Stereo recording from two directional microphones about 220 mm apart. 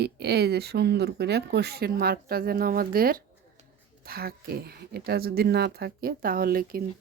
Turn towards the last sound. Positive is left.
turn(degrees=-40)  # may be behind; listen again after turning